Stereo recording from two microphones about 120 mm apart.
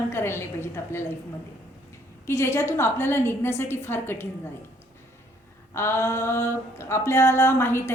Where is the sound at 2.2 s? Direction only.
20° left (ahead or behind).